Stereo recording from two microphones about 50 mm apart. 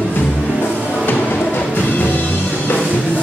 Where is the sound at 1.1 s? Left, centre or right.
Left.